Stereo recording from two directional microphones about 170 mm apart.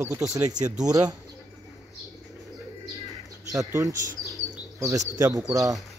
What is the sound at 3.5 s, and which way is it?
Speech, 20° right (ahead or behind).